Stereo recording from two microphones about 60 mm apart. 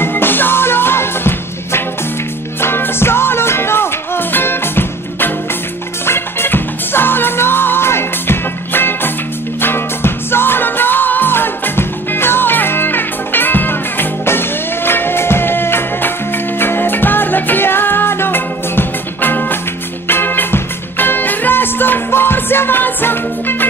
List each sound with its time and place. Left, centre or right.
0.0 s music: left